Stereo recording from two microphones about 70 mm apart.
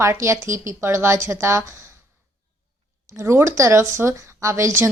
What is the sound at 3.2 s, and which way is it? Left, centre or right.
A woman's voice, right.